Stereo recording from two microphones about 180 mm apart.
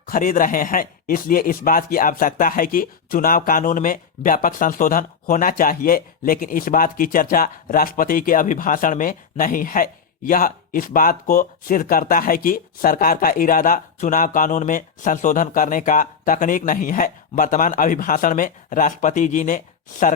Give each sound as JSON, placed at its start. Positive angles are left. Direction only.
{"t": 0.1, "sound": "speech", "side_deg": 50}